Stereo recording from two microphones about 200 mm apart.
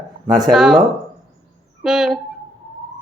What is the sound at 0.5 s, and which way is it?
Speech, 5° right (ahead or behind).